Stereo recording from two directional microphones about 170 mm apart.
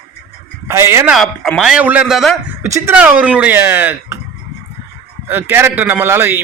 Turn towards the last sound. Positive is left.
turn(degrees=-15)  # may be behind; listen again after turning